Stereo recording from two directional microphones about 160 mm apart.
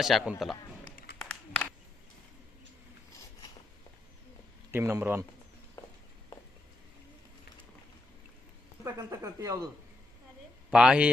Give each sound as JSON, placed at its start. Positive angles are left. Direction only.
{"t": 0.0, "sound": "a man's voice", "side_deg": 0}
{"t": 1.2, "sound": "a sound", "side_deg": 10}
{"t": 4.7, "sound": "a man's voice", "side_deg": -15}
{"t": 5.8, "sound": "a sound", "side_deg": 20}
{"t": 8.8, "sound": "speech", "side_deg": -20}
{"t": 10.7, "sound": "a man's voice", "side_deg": -5}